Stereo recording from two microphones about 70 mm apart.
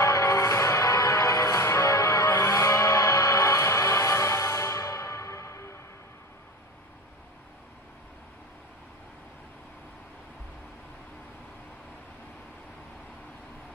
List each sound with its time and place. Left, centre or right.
0.0 s music: left